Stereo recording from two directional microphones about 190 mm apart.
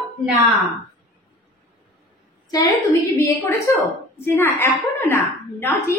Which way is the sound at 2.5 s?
20° left (ahead or behind).